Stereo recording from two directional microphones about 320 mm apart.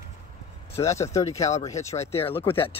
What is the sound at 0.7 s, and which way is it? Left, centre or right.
Speech, centre.